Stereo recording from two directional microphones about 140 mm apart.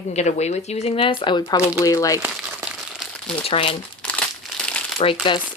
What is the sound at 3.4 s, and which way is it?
Speech, 40° left (ahead or behind).